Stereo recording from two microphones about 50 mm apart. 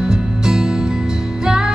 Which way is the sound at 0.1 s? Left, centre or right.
Centre.